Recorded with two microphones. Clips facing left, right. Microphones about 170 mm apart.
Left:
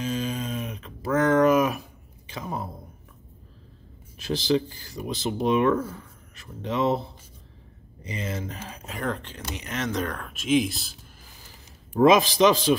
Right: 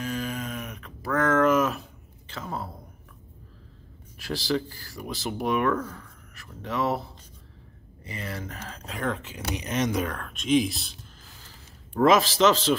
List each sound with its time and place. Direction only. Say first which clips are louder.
0.0 s a sound: left 3 dB; 20° left (ahead or behind)
4.2 s speech: left 4 dB; 20° left (ahead or behind)
8.9 s speech: even; centre (ahead or behind)
9.6 s speech: right 2 dB; 20° right (ahead or behind)
10.0 s speech: even; centre (ahead or behind)
11.4 s a man's voice: even; 15° left (ahead or behind)